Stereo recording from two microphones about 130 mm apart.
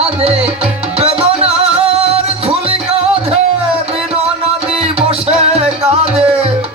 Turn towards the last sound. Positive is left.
turn(degrees=-55)  # may be behind; listen again after turning